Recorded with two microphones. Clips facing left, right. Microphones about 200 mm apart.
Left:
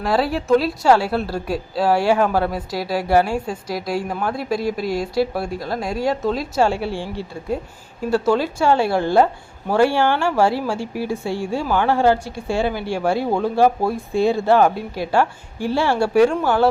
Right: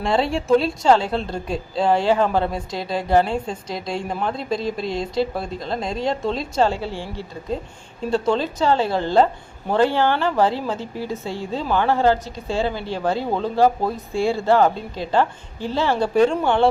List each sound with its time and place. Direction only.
0.0 s speech: 5° left (ahead or behind)
4.9 s speech: 25° right (ahead or behind)
5.2 s speech: 10° left (ahead or behind)
5.5 s speech: 20° right (ahead or behind)
6.1 s a woman's voice: 5° left (ahead or behind)
6.7 s speech: 15° left (ahead or behind)
8.1 s speech: 5° left (ahead or behind)